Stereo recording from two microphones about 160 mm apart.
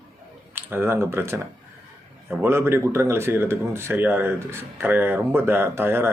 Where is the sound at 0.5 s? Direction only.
15° right (ahead or behind).